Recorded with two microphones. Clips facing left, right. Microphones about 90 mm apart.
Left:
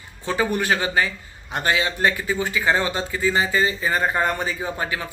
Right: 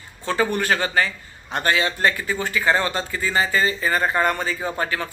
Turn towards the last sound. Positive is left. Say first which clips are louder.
# right 2 dB
turn(degrees=15)  # may be behind; listen again after turning